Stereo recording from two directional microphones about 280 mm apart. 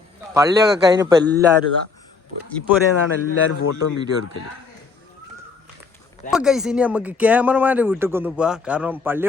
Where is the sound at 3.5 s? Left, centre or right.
Left.